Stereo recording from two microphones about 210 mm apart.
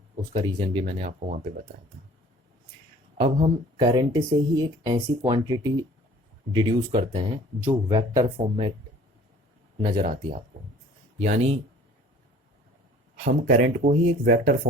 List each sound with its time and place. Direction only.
0.3 s speech: 20° right (ahead or behind)
3.2 s speech: 25° right (ahead or behind)
9.8 s speech: 25° right (ahead or behind)
13.1 s speech: 40° right (ahead or behind)